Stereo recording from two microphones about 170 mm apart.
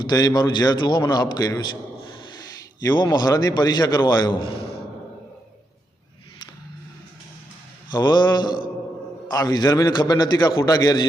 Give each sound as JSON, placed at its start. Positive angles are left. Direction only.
{"t": 0.0, "sound": "a man's voice", "side_deg": 25}
{"t": 7.9, "sound": "a man's voice", "side_deg": 25}